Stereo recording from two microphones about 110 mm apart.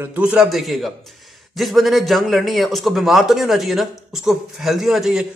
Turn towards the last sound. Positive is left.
turn(degrees=-5)  # may be behind; listen again after turning